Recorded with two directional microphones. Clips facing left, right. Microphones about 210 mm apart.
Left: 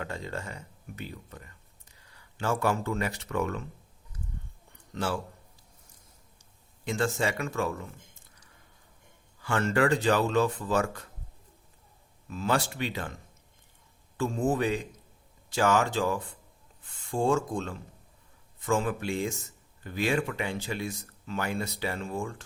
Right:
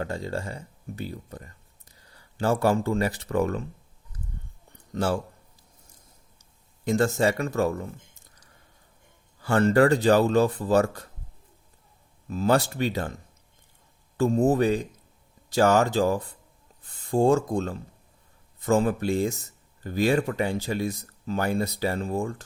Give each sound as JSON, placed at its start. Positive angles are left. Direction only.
{"t": 0.0, "sound": "speech", "side_deg": -35}
{"t": 4.9, "sound": "speech", "side_deg": -40}
{"t": 6.8, "sound": "speech", "side_deg": -40}
{"t": 9.4, "sound": "speech", "side_deg": -35}
{"t": 12.3, "sound": "speech", "side_deg": -40}
{"t": 14.2, "sound": "speech", "side_deg": -40}